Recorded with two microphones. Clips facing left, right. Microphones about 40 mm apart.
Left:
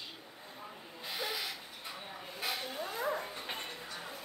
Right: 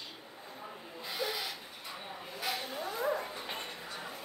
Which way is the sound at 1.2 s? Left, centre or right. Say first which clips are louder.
Right 3 dB; left.